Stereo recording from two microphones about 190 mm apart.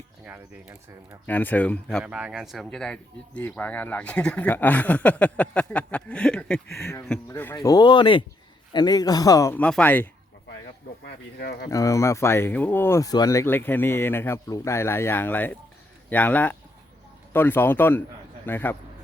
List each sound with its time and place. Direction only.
0.3 s speech: 10° right (ahead or behind)
1.3 s speech: 10° left (ahead or behind)
7.5 s speech: 20° left (ahead or behind)
11.0 s speech: 60° left (ahead or behind)
11.7 s speech: 15° left (ahead or behind)